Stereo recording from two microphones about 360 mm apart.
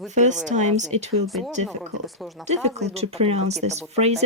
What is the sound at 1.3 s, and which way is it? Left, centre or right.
Speech, centre.